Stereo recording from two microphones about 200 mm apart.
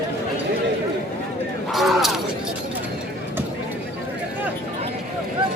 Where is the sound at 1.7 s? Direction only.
Centre (ahead or behind).